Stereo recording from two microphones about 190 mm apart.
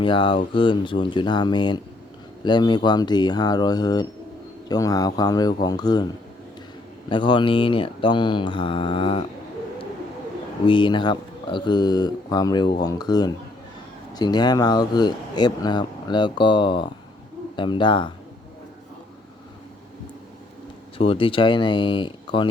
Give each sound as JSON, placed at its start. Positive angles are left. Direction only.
{"t": 0.0, "sound": "speech", "side_deg": 25}
{"t": 7.1, "sound": "speech", "side_deg": 25}
{"t": 10.7, "sound": "speech", "side_deg": 25}
{"t": 21.0, "sound": "speech", "side_deg": 30}